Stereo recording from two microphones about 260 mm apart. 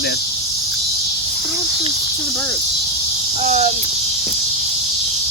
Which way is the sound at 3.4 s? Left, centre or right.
Right.